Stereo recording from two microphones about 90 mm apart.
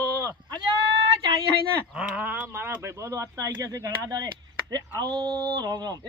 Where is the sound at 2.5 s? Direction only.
25° right (ahead or behind); by 4.3 s 40° right (ahead or behind).